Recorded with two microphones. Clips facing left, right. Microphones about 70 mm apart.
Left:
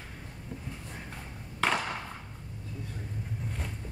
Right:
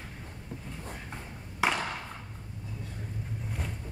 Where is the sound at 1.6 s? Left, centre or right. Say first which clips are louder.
Even; centre.